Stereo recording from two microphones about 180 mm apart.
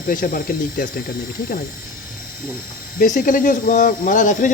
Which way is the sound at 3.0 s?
45° left (ahead or behind).